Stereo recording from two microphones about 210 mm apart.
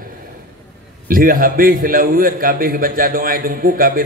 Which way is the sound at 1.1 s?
40° right (ahead or behind).